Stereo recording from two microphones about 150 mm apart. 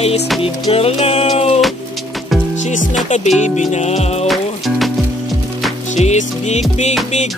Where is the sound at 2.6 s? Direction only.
55° left (ahead or behind).